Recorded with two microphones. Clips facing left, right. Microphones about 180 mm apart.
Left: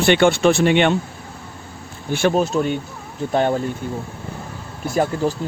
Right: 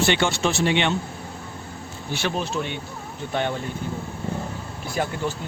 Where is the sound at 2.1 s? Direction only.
50° left (ahead or behind).